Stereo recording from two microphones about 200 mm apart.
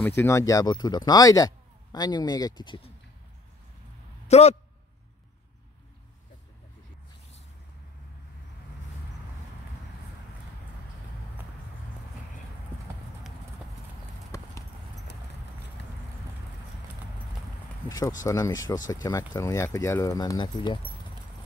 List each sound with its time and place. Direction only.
0.0 s speech: 10° left (ahead or behind)
4.3 s a man's voice: 35° left (ahead or behind)
17.8 s speech: 20° left (ahead or behind)